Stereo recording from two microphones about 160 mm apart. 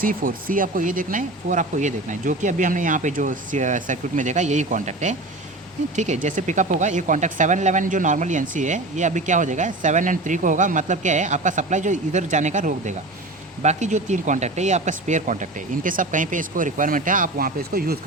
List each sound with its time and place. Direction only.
0.0 s speech: 60° right (ahead or behind)
6.2 s speech: 50° right (ahead or behind); by 17.9 s 70° right (ahead or behind)